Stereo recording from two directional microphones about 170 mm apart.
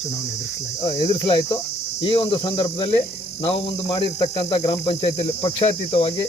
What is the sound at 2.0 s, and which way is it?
Speech, 30° left (ahead or behind).